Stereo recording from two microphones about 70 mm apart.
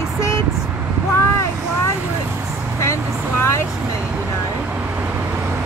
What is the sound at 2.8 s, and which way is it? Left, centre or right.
Speech, left.